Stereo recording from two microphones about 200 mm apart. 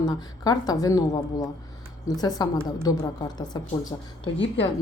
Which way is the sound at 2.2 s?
20° left (ahead or behind).